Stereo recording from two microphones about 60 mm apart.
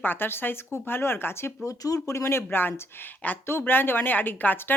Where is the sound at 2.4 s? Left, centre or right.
Left.